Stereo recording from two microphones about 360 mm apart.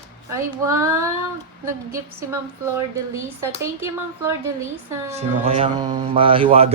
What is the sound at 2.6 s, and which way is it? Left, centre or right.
Speech, centre.